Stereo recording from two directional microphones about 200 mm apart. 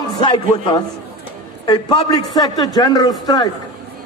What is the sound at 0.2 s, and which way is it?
A man's voice, 25° left (ahead or behind).